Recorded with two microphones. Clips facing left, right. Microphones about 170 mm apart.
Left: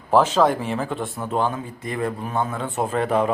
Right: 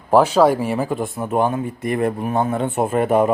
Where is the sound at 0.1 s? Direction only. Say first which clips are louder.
Right 4 dB; 10° right (ahead or behind).